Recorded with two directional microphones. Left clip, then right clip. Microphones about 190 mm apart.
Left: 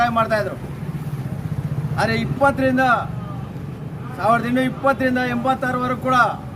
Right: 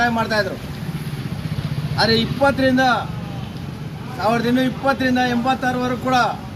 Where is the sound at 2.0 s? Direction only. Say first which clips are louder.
Right 2 dB; 5° left (ahead or behind).